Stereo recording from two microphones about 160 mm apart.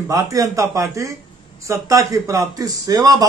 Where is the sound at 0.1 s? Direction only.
20° right (ahead or behind).